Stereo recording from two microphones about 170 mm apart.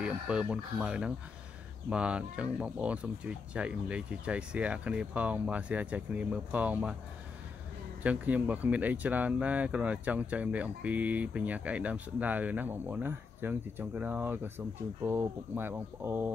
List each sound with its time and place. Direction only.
0.0 s speech: 5° right (ahead or behind)
8.0 s speech: 10° right (ahead or behind)